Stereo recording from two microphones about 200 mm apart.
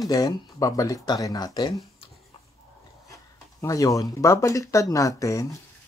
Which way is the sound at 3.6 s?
15° left (ahead or behind).